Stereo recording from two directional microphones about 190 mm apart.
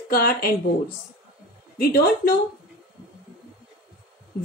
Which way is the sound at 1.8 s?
55° left (ahead or behind).